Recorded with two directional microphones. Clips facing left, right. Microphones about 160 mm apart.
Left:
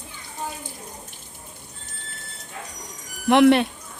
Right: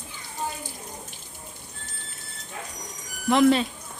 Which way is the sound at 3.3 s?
70° left (ahead or behind).